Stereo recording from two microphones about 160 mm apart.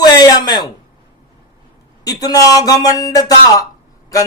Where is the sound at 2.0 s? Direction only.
25° left (ahead or behind).